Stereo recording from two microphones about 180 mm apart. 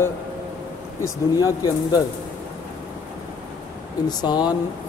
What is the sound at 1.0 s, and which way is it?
Speech, 20° left (ahead or behind).